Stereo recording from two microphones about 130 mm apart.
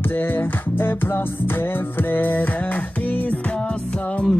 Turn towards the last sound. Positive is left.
turn(degrees=10)  # may be behind; listen again after turning